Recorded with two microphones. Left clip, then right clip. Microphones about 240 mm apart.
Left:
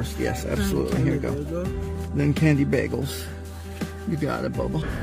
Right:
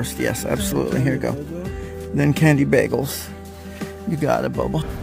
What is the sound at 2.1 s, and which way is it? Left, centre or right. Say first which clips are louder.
Speech: right 5 dB; right.